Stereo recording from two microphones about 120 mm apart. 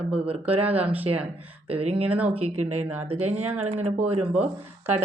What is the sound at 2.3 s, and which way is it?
Speech, 55° right (ahead or behind).